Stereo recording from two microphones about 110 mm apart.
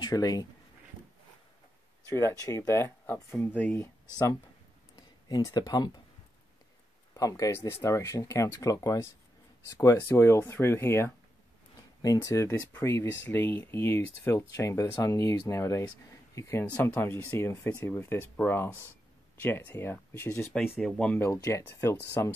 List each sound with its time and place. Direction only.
0.0 s speech: 35° left (ahead or behind)
2.0 s speech: 25° left (ahead or behind)
3.3 s speech: 15° left (ahead or behind)
3.7 s speech: 25° left (ahead or behind)
7.2 s speech: 30° left (ahead or behind)
20.5 s speech: 15° left (ahead or behind)
21.2 s speech: 25° left (ahead or behind)